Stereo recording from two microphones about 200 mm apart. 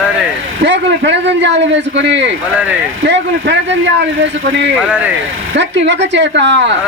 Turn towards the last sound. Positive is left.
turn(degrees=-60)  # may be behind; listen again after turning